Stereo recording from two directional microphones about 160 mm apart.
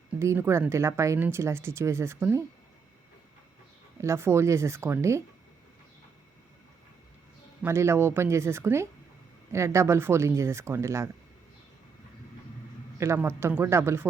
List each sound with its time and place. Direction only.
0.2 s speech: 15° right (ahead or behind)
4.0 s speech: 15° right (ahead or behind)
7.6 s speech: 15° right (ahead or behind)
13.0 s speech: 15° right (ahead or behind)